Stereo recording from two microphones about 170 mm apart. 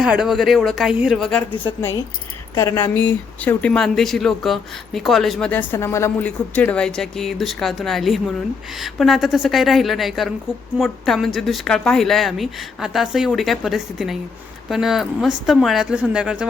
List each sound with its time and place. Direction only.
0.0 s speech: 5° right (ahead or behind)
2.6 s speech: 20° left (ahead or behind); by 16.5 s 5° right (ahead or behind)